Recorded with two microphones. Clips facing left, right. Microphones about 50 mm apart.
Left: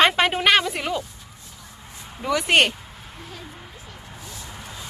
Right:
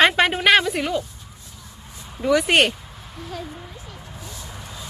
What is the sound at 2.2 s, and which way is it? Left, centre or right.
Speech, centre.